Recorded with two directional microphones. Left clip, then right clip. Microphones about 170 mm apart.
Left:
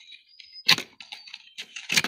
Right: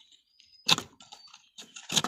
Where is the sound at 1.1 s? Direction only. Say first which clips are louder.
Left 9 dB; 5° right (ahead or behind).